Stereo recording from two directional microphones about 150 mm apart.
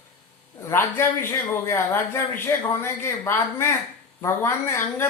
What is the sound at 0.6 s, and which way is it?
A man's voice, 15° left (ahead or behind).